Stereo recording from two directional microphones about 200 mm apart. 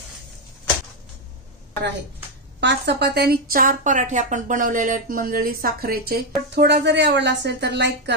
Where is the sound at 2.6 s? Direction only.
60° right (ahead or behind).